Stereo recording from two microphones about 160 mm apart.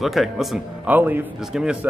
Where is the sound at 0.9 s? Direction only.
10° right (ahead or behind).